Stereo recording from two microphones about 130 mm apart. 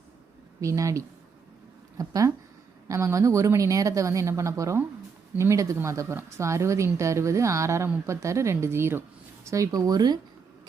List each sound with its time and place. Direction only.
0.6 s speech: 25° right (ahead or behind)